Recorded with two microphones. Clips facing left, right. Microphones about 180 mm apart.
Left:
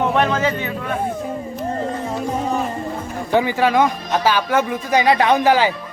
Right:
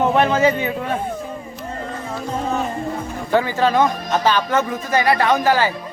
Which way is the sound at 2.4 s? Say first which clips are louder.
Right 1 dB; 5° left (ahead or behind).